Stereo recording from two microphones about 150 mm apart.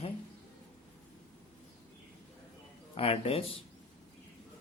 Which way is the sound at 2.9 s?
40° left (ahead or behind).